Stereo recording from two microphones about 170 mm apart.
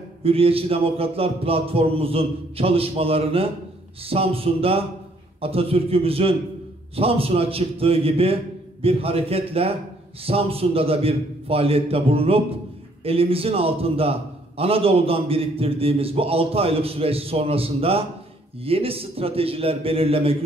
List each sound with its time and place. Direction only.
0.2 s a man's voice: 35° right (ahead or behind)